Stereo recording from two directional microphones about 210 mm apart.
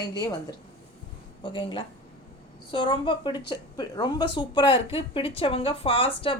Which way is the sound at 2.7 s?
20° left (ahead or behind).